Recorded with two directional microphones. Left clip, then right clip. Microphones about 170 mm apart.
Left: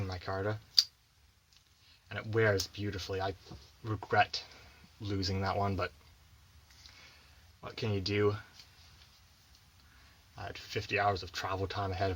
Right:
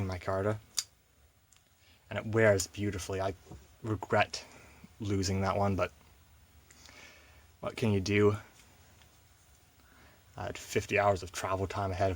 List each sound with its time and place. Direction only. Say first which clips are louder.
0.0 s speech: right 4 dB; 55° right (ahead or behind)
2.0 s speech: right 4 dB; 50° right (ahead or behind)
6.8 s a sound: right 3 dB; 55° right (ahead or behind)
7.6 s speech: right 4 dB; 55° right (ahead or behind)
10.3 s speech: right 5 dB; 60° right (ahead or behind)